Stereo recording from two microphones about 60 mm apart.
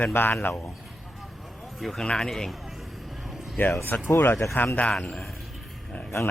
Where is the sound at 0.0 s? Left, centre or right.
Left.